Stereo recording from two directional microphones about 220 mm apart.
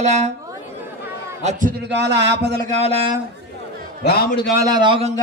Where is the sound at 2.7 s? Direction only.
30° right (ahead or behind).